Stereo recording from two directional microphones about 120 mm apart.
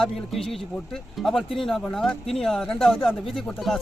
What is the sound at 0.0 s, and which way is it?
Speech, 5° left (ahead or behind).